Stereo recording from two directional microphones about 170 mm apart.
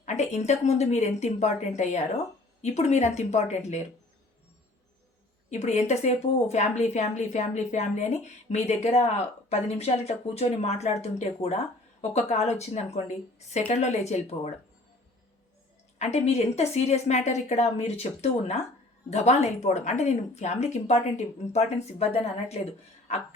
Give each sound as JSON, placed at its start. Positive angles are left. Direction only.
{"t": 0.0, "sound": "a woman's voice", "side_deg": 40}
{"t": 5.5, "sound": "a woman's voice", "side_deg": 40}
{"t": 16.0, "sound": "a woman's voice", "side_deg": 40}